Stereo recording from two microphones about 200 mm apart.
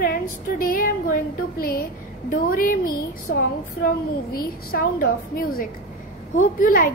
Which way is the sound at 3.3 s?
55° left (ahead or behind).